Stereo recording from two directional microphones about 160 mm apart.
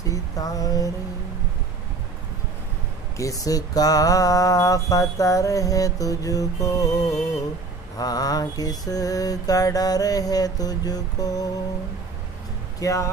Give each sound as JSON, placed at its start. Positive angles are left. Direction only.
{"t": 0.0, "sound": "mantra", "side_deg": 20}
{"t": 3.2, "sound": "mantra", "side_deg": 20}
{"t": 12.8, "sound": "mantra", "side_deg": 20}